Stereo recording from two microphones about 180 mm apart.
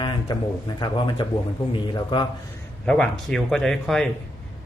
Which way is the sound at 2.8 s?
5° left (ahead or behind).